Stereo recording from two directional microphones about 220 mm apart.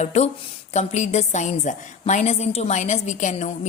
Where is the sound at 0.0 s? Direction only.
30° left (ahead or behind).